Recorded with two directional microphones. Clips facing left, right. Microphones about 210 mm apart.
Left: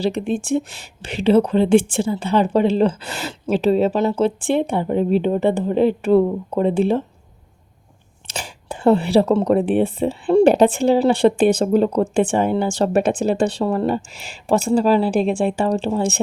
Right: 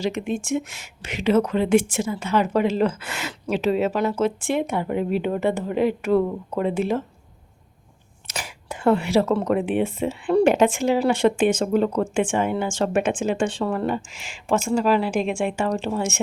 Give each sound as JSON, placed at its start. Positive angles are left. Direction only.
{"t": 0.0, "sound": "speech", "side_deg": 35}
{"t": 8.3, "sound": "speech", "side_deg": 30}